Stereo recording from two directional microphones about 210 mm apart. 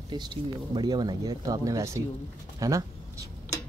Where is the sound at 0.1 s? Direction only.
20° right (ahead or behind).